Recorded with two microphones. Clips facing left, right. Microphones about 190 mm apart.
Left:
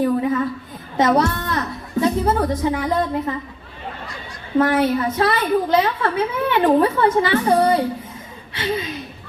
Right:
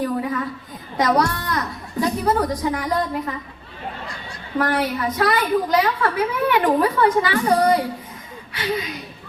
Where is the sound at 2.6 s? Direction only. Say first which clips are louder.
Left 2 dB; 25° left (ahead or behind).